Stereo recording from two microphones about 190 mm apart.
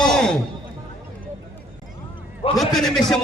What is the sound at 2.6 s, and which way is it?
Speech, centre (ahead or behind).